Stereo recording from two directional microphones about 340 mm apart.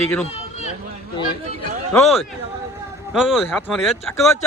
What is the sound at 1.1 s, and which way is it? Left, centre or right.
Speech, centre.